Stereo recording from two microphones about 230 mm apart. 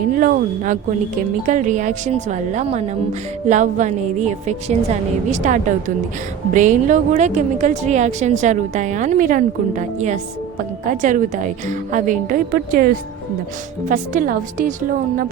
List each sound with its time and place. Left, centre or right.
0.1 s a woman's voice: right